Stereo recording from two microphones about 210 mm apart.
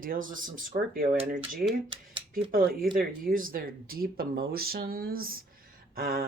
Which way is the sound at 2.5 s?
45° right (ahead or behind).